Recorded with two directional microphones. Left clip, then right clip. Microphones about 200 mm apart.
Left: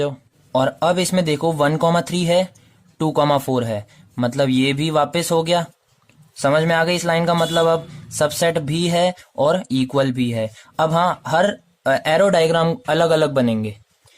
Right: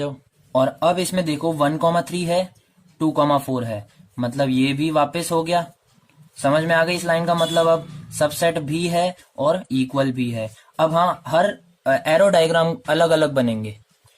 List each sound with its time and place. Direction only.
0.5 s a man's voice: 40° left (ahead or behind)